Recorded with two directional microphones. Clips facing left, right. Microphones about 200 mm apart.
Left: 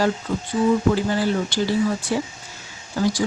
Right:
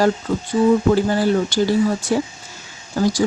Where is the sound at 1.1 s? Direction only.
45° right (ahead or behind).